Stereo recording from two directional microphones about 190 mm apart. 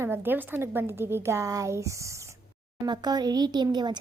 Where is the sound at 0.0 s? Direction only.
10° right (ahead or behind).